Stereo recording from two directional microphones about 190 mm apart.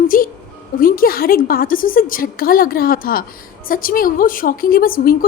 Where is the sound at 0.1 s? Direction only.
45° left (ahead or behind).